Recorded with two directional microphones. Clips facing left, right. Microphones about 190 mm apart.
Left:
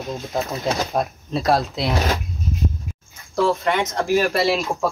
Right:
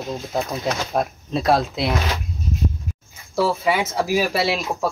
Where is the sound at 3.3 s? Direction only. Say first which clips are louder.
Even; 5° right (ahead or behind).